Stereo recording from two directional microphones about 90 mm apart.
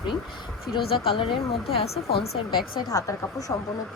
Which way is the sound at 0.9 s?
80° left.